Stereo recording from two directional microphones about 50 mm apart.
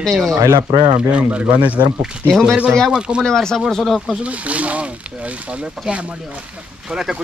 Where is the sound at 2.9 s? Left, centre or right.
Centre.